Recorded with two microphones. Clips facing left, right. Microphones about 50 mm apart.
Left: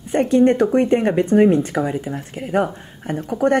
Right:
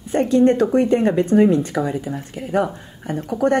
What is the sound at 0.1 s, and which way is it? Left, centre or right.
Speech, left.